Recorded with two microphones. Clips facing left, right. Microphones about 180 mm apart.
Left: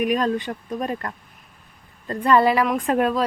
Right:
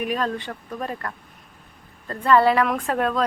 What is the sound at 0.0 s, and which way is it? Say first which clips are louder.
A woman's voice: left 4 dB; 15° left (ahead or behind).